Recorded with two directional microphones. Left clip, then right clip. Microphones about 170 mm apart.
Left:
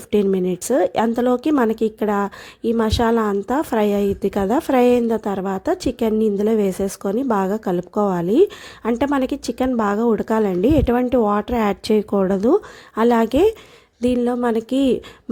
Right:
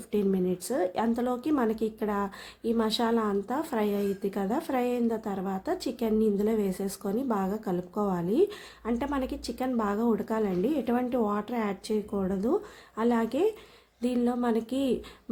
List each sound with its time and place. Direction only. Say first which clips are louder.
0.1 s speech: left 10 dB; 45° left (ahead or behind)